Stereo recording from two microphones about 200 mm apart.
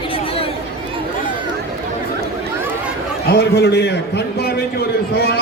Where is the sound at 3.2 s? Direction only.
55° left (ahead or behind).